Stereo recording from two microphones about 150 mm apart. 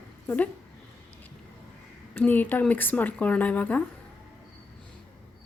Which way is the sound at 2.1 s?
10° left (ahead or behind).